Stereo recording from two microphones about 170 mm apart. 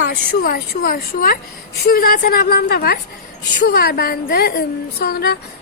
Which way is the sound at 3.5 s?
80° left.